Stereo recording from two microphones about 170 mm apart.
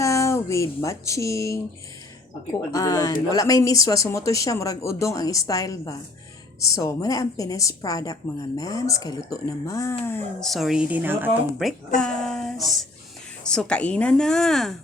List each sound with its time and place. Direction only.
0.0 s speech: 20° left (ahead or behind)
2.7 s a woman's voice: 20° left (ahead or behind)
10.1 s speech: 5° left (ahead or behind); by 11.4 s 10° right (ahead or behind)
11.9 s speech: 5° left (ahead or behind)